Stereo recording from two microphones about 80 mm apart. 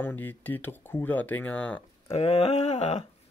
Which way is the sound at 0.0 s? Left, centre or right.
Left.